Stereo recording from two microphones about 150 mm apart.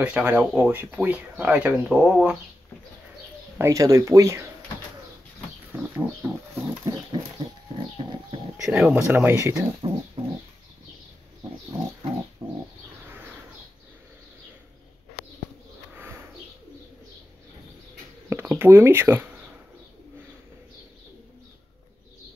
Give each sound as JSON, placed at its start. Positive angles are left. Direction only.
{"t": 0.0, "sound": "speech", "side_deg": -10}
{"t": 3.5, "sound": "speech", "side_deg": -20}
{"t": 5.9, "sound": "speech", "side_deg": -10}
{"t": 6.9, "sound": "speech", "side_deg": -35}
{"t": 8.7, "sound": "speech", "side_deg": -15}
{"t": 9.8, "sound": "speech", "side_deg": -35}
{"t": 12.4, "sound": "speech", "side_deg": -20}
{"t": 18.3, "sound": "speech", "side_deg": -15}